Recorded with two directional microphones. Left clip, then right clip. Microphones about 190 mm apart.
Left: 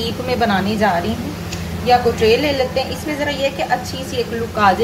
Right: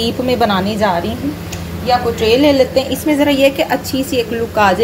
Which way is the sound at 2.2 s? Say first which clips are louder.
Right 4 dB; 35° right (ahead or behind).